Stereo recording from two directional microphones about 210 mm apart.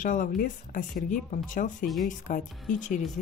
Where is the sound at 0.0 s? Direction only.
40° left (ahead or behind).